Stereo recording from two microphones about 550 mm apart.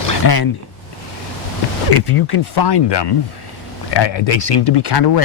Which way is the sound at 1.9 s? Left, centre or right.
Left.